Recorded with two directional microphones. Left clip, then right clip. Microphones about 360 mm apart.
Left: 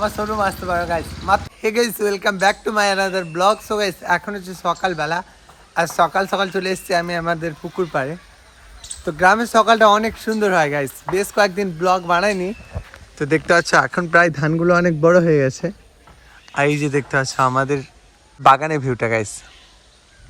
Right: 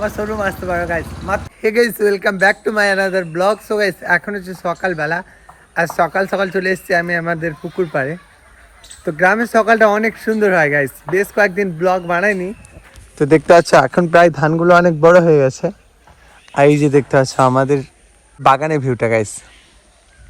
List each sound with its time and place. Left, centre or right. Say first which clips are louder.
0.0 s speech: even; centre